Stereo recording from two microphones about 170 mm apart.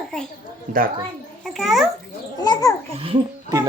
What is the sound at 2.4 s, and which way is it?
Speech, 20° left (ahead or behind).